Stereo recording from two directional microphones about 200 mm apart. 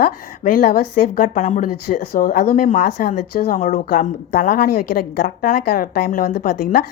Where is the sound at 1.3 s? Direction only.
35° left (ahead or behind).